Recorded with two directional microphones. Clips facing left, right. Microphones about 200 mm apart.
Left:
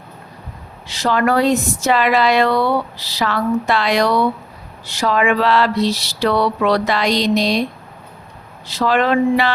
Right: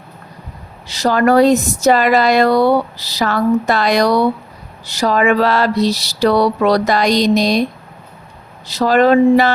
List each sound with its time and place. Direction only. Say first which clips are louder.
0.9 s speech: right 4 dB; 40° right (ahead or behind)
8.6 s speech: right 5 dB; 40° right (ahead or behind)